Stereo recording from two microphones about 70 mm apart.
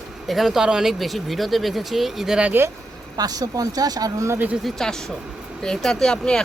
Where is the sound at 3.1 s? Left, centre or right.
Right.